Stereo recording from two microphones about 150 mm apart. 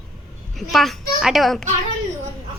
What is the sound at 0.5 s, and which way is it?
A child's voice, centre (ahead or behind).